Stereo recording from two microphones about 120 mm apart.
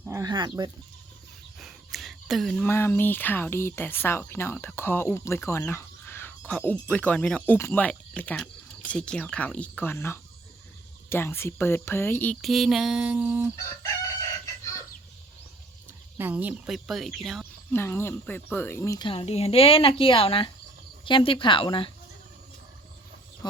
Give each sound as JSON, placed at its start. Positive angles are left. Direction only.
{"t": 0.1, "sound": "speech", "side_deg": -30}
{"t": 1.5, "sound": "a sound", "side_deg": 0}
{"t": 2.6, "sound": "speech", "side_deg": 20}
{"t": 12.4, "sound": "speech", "side_deg": 0}
{"t": 14.4, "sound": "chicken", "side_deg": 25}
{"t": 16.1, "sound": "speech", "side_deg": -15}
{"t": 17.7, "sound": "speech", "side_deg": 20}
{"t": 18.9, "sound": "speech", "side_deg": 45}
{"t": 19.2, "sound": "speech", "side_deg": 60}